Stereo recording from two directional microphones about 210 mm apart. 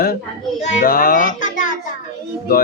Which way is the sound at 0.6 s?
40° left (ahead or behind).